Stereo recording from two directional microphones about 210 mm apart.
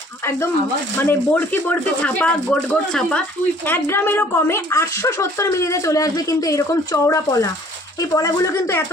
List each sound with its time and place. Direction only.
1.0 s a woman's voice: 10° left (ahead or behind)